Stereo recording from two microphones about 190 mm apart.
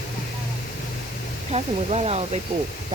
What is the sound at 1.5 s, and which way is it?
Speech, 35° right (ahead or behind).